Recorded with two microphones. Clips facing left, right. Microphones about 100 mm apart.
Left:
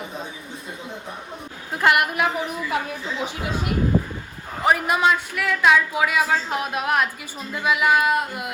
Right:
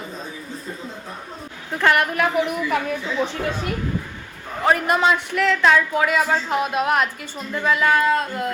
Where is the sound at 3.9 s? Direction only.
50° left (ahead or behind).